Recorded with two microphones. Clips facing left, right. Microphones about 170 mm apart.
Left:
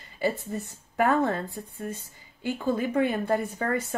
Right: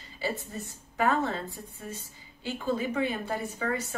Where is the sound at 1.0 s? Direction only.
55° left (ahead or behind).